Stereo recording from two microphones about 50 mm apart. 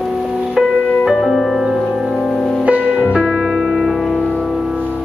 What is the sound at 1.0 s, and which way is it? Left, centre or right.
Music, centre.